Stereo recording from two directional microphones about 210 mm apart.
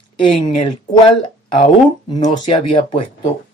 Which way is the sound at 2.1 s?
20° left (ahead or behind).